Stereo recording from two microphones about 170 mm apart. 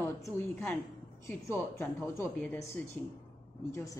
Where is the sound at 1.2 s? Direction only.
15° left (ahead or behind).